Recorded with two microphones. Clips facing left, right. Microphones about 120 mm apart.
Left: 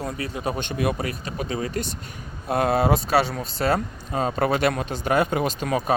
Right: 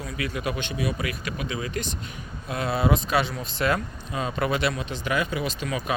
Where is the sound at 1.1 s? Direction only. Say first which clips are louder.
Left 2 dB; 40° left (ahead or behind).